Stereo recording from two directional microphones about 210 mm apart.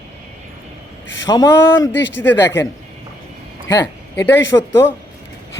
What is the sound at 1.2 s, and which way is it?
A man's voice, 20° left (ahead or behind).